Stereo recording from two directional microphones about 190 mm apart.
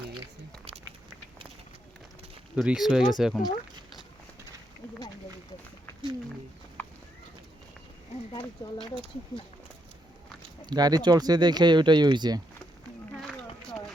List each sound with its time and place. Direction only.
2.6 s speech: centre (ahead or behind)
6.8 s clip-clop: 10° left (ahead or behind)
10.7 s speech: 20° right (ahead or behind)